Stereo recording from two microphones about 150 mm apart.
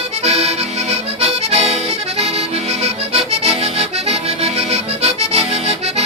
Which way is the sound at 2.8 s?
45° right (ahead or behind).